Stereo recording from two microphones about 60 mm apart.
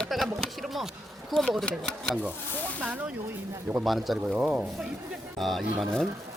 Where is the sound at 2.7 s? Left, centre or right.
Right.